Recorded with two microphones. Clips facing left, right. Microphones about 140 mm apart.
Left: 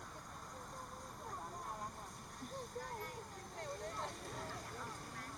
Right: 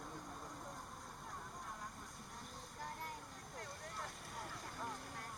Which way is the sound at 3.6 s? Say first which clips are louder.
Left 5 dB; 30° left (ahead or behind).